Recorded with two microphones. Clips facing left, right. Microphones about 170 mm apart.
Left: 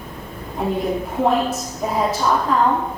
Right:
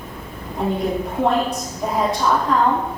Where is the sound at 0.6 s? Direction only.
Centre (ahead or behind).